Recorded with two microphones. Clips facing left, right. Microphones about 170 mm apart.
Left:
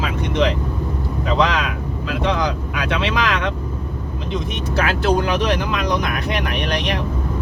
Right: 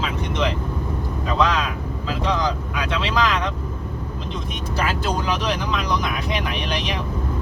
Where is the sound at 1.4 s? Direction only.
65° left (ahead or behind).